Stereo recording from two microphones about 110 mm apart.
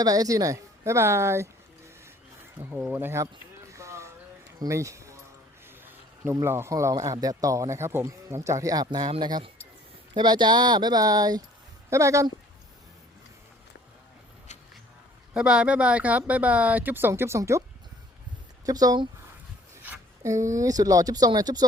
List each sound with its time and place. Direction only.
0.0 s speech: 35° right (ahead or behind)
2.6 s speech: 15° right (ahead or behind)
3.7 s a sound: 30° right (ahead or behind)
4.6 s speech: 30° right (ahead or behind)
6.3 s a man's voice: 25° right (ahead or behind)
15.3 s speech: 10° right (ahead or behind); by 17.6 s 25° right (ahead or behind)
18.6 s a man's voice: 35° right (ahead or behind)
20.2 s a man's voice: 30° right (ahead or behind)